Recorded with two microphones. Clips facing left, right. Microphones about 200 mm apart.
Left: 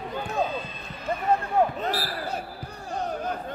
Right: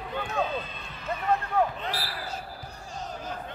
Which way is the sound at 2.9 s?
60° left (ahead or behind).